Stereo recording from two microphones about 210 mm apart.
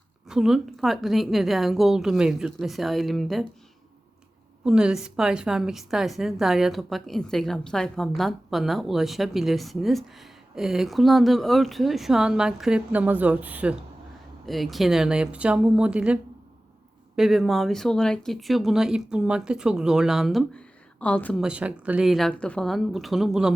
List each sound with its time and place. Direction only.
0.3 s a woman's voice: centre (ahead or behind)
4.6 s a woman's voice: 5° right (ahead or behind)
17.2 s a woman's voice: centre (ahead or behind)
21.4 s a woman's voice: 5° right (ahead or behind)